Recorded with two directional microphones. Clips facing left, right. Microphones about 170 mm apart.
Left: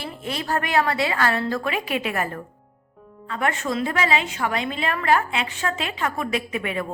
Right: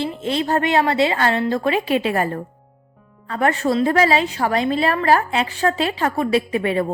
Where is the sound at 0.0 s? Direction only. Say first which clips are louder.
Right 8 dB; 25° right (ahead or behind).